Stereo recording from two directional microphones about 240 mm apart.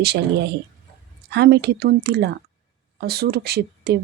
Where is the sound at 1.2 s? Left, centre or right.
Right.